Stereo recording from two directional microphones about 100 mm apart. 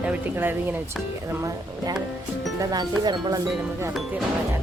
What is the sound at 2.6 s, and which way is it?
Speech, 40° right (ahead or behind).